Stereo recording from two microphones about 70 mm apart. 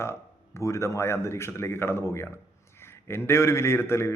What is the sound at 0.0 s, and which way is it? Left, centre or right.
A man's voice, left.